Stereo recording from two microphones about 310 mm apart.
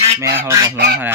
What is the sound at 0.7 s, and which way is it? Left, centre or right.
Speech, right.